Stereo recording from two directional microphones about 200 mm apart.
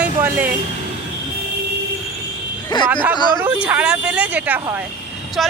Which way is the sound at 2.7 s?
20° left (ahead or behind).